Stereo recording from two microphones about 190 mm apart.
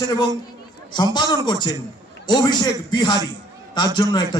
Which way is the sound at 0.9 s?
20° left (ahead or behind).